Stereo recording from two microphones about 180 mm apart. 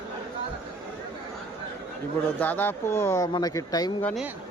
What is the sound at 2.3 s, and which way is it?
Speech, 10° left (ahead or behind).